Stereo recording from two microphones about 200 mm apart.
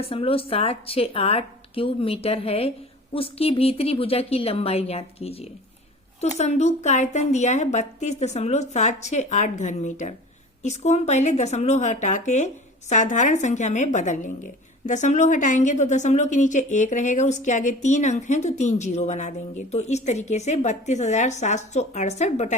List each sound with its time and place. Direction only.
0.0 s a woman's voice: 25° left (ahead or behind)